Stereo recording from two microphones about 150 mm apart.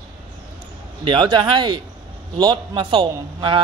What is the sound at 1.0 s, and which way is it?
A man's voice, 35° right (ahead or behind).